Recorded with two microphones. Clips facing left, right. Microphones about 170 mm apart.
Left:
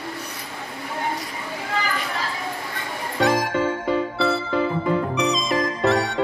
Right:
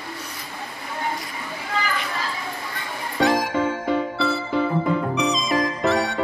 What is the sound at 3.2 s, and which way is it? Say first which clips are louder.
Music: even; centre (ahead or behind).